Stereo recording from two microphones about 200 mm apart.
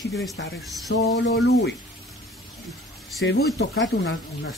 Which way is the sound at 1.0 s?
60° left (ahead or behind).